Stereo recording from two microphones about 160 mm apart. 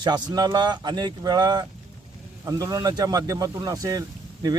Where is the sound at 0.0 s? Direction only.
25° right (ahead or behind).